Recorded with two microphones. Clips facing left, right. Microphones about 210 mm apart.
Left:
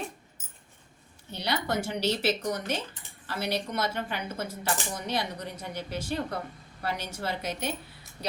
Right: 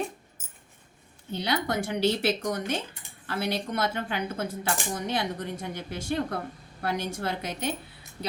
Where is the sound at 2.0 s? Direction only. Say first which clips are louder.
Right 4 dB; 55° right (ahead or behind).